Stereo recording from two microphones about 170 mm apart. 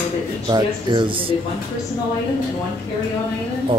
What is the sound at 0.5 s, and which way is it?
Speech, 25° right (ahead or behind).